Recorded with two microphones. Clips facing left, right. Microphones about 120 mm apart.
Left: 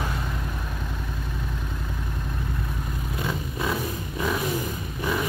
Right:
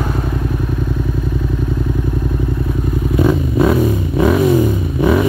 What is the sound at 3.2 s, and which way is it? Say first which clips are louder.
Vehicle: right 16 dB; 65° right (ahead or behind).